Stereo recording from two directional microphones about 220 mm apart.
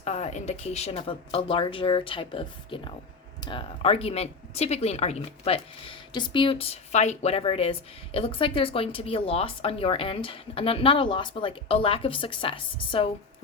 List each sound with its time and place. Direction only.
0.0 s speech: 30° left (ahead or behind)